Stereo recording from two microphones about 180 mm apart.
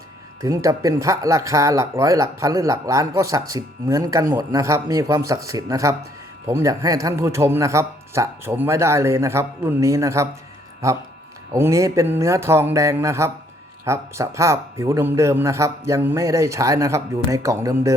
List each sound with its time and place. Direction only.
0.4 s speech: 20° right (ahead or behind)
11.5 s speech: 15° right (ahead or behind)